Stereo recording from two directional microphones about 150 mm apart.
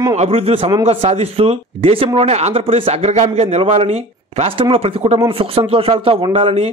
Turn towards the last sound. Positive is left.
turn(degrees=-40)  # may be behind; listen again after turning